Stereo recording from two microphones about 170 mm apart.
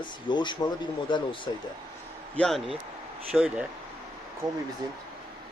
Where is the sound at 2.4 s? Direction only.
Centre (ahead or behind).